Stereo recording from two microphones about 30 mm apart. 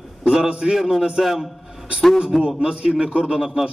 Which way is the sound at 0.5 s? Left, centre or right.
Right.